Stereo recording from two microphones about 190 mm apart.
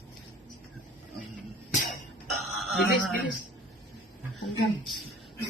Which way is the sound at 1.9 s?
Centre (ahead or behind).